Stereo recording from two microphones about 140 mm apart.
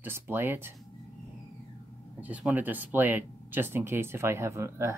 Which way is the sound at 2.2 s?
10° right (ahead or behind).